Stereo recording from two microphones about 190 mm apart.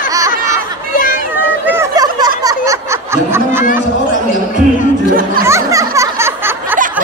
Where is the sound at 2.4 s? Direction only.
20° right (ahead or behind).